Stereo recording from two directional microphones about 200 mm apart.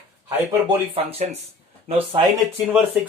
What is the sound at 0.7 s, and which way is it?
Speech, 30° right (ahead or behind).